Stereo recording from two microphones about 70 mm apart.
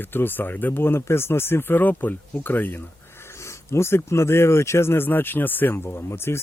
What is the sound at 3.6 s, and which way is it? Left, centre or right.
Speech, left.